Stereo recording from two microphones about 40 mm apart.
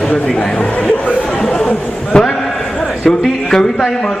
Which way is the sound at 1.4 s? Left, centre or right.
Centre.